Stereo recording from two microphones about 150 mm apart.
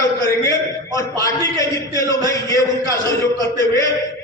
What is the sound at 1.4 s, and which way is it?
A man's voice, 20° left (ahead or behind).